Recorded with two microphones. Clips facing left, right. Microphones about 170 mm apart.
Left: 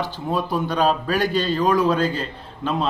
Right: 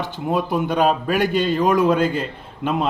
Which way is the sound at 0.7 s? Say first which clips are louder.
Right 2 dB; 20° right (ahead or behind).